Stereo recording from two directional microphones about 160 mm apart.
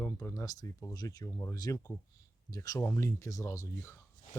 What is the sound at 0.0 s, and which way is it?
Speech, 15° left (ahead or behind).